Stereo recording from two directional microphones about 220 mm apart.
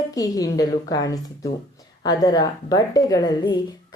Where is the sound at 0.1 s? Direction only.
15° left (ahead or behind).